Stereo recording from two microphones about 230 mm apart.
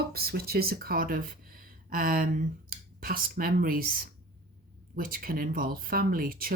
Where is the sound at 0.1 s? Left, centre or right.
Right.